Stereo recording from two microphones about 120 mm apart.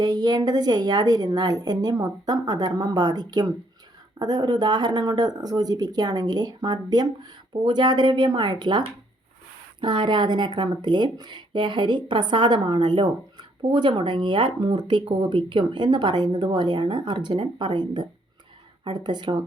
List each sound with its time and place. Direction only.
0.0 s speech: 35° right (ahead or behind)
9.8 s speech: 40° right (ahead or behind)